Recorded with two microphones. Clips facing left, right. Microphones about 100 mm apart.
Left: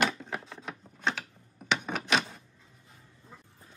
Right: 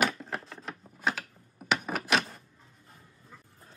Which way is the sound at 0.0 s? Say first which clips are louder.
Even; centre (ahead or behind).